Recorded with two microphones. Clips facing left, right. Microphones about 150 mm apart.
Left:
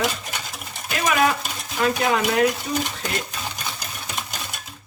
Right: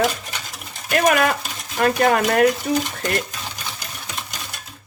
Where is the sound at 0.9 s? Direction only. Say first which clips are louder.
Right 3 dB; 50° right (ahead or behind).